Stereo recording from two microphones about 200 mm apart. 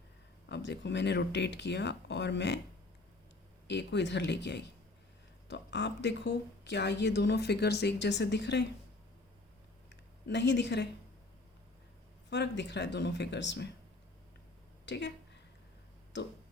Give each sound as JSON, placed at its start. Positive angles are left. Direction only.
{"t": 0.4, "sound": "a woman's voice", "side_deg": 60}
{"t": 3.7, "sound": "a woman's voice", "side_deg": 60}
{"t": 9.9, "sound": "a sound", "side_deg": 60}
{"t": 12.3, "sound": "a woman's voice", "side_deg": 60}
{"t": 14.8, "sound": "speech", "side_deg": 60}